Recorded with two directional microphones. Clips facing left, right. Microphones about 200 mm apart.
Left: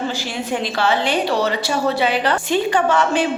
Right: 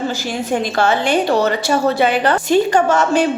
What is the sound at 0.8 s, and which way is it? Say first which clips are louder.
A woman's voice: right 3 dB; 45° right (ahead or behind).